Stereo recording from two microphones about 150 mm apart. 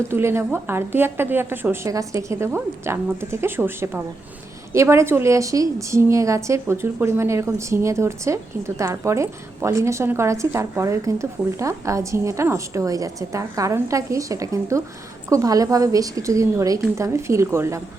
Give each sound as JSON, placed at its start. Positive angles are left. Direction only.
{"t": 0.1, "sound": "a woman's voice", "side_deg": -15}